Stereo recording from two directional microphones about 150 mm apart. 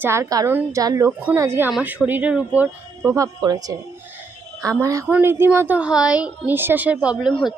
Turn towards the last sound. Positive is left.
turn(degrees=5)  # may be behind; listen again after turning